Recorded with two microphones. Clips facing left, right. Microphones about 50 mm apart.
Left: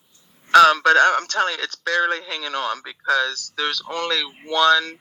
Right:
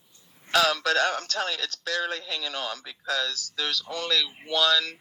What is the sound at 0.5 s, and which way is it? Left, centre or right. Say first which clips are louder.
Speech: left 10 dB; left.